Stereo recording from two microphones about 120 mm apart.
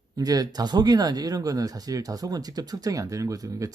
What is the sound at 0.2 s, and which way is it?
Speech, 30° right (ahead or behind).